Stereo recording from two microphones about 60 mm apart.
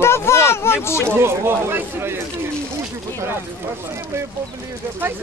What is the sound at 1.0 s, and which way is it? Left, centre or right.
Speech, right.